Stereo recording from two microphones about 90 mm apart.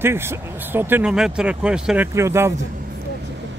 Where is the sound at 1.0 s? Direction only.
10° right (ahead or behind).